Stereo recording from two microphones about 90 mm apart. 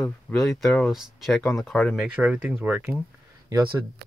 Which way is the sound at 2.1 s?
15° right (ahead or behind).